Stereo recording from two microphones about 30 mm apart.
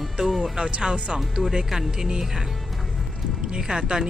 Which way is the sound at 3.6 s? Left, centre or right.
Centre.